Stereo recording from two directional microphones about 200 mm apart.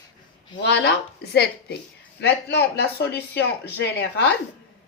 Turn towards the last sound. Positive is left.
turn(degrees=60)  # may be behind; listen again after turning